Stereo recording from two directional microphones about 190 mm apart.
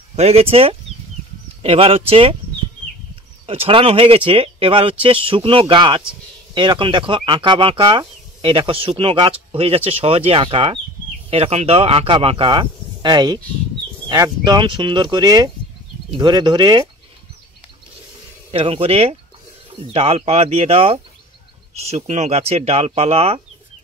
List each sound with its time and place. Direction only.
0.1 s speech: 35° right (ahead or behind)
3.4 s speech: 30° right (ahead or behind)
18.5 s speech: 30° right (ahead or behind)